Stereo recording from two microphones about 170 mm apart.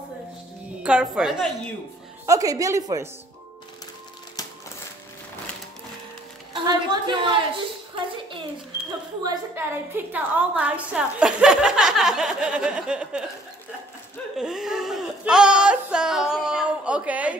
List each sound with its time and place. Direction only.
0.8 s a woman's voice: 5° right (ahead or behind)
2.2 s speech: 20° right (ahead or behind)
4.4 s a sound: 20° left (ahead or behind)
6.5 s a woman's voice: 30° right (ahead or behind)
9.6 s a woman's voice: 10° right (ahead or behind)
14.3 s speech: 5° right (ahead or behind)